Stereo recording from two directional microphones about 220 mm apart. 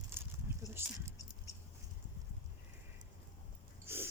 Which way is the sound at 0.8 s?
10° right (ahead or behind).